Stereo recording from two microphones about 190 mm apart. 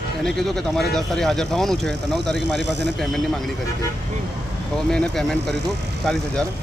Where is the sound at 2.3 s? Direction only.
65° right (ahead or behind).